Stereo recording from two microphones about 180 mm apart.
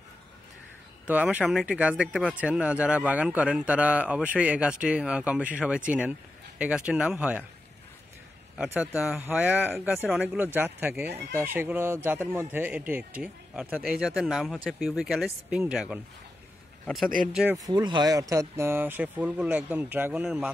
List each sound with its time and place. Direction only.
1.0 s speech: 10° right (ahead or behind)
8.6 s speech: 5° right (ahead or behind)
11.1 s speech: 65° right (ahead or behind)
11.3 s a man's voice: 15° right (ahead or behind)
17.6 s speech: 25° right (ahead or behind); by 20.5 s 5° right (ahead or behind)